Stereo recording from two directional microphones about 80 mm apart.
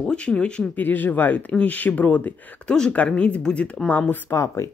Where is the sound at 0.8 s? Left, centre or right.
Left.